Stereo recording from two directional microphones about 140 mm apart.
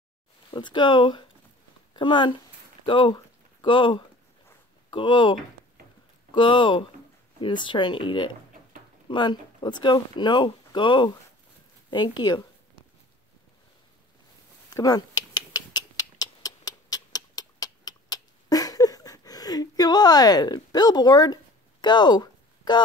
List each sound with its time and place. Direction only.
0.5 s speech: 35° left (ahead or behind)
6.3 s speech: 35° left (ahead or behind)
14.7 s a sound: 25° left (ahead or behind)